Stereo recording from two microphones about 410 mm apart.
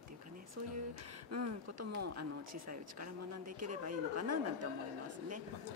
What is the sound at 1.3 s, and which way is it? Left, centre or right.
A woman's voice, right.